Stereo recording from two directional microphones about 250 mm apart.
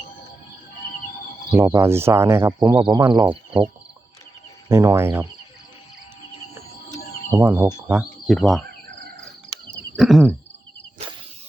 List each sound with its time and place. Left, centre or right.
1.5 s speech: centre
4.7 s speech: centre
7.3 s speech: centre
9.9 s a sound: centre